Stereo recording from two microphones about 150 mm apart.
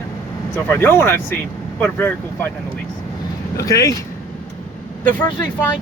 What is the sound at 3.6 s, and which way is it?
Speech, 20° left (ahead or behind).